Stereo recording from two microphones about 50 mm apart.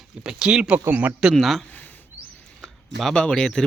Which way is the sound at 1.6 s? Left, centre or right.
Left.